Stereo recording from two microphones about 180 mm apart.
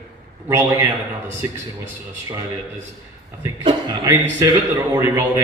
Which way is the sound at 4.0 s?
15° right (ahead or behind).